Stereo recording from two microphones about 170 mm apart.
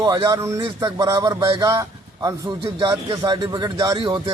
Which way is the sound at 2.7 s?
30° right (ahead or behind).